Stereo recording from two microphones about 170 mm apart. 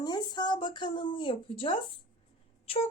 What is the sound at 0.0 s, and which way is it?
A woman's voice, 25° left (ahead or behind).